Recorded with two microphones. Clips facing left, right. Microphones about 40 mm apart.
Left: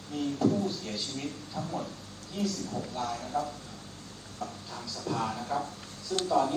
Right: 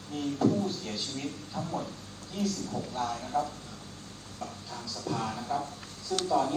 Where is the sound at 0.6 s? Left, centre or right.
Right.